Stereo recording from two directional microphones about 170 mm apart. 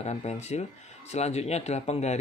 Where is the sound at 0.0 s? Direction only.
40° left (ahead or behind).